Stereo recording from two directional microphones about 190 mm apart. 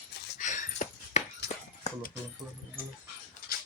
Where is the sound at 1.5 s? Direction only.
45° left (ahead or behind).